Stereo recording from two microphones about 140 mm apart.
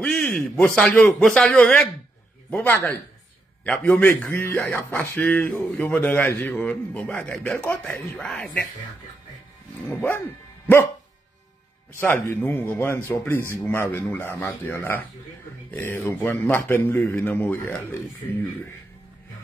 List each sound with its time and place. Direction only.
0.0 s a man's voice: 5° left (ahead or behind)
9.8 s a man's voice: 15° left (ahead or behind)
12.0 s a man's voice: 15° left (ahead or behind)